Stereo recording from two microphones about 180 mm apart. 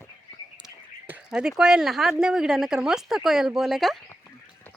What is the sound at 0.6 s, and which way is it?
Speech, 5° right (ahead or behind).